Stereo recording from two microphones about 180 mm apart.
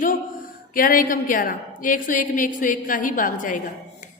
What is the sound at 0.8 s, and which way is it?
A woman's voice, 50° left (ahead or behind).